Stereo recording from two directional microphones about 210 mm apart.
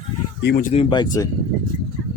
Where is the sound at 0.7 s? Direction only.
25° left (ahead or behind).